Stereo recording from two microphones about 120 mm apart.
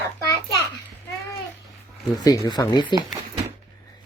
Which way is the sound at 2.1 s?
30° left (ahead or behind).